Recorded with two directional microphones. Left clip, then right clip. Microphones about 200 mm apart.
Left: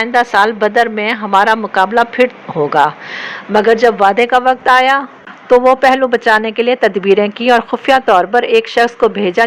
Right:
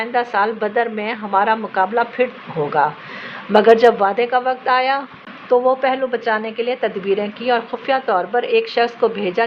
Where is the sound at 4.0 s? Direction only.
30° left (ahead or behind).